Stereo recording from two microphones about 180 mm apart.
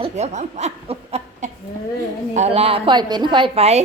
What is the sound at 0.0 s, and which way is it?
A woman's voice, 40° right (ahead or behind).